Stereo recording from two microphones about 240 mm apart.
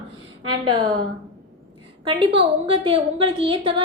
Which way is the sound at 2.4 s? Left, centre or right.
Right.